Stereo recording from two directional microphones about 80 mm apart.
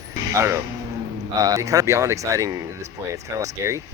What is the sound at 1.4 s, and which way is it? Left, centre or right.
Speech, right.